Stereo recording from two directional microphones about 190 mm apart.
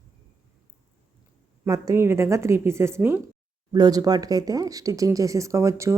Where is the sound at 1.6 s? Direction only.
15° right (ahead or behind).